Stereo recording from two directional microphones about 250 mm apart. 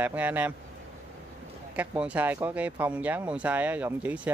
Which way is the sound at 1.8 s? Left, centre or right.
Centre.